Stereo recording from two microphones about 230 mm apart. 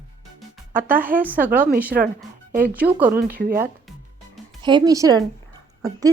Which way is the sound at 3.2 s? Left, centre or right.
Right.